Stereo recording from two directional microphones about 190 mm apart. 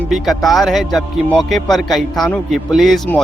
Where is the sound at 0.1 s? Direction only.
Centre (ahead or behind).